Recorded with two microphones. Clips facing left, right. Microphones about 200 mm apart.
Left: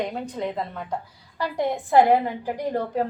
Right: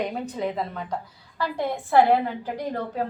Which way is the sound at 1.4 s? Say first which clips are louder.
Left 2 dB; 15° left (ahead or behind).